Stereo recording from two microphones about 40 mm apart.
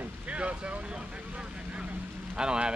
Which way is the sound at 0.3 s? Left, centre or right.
Right.